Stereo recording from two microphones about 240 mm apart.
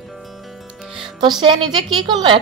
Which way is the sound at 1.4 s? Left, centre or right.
Centre.